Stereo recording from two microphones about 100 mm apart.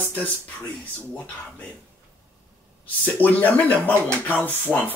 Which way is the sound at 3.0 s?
15° left (ahead or behind).